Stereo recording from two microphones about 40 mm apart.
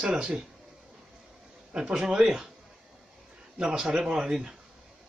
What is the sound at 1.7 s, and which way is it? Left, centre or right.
Speech, right.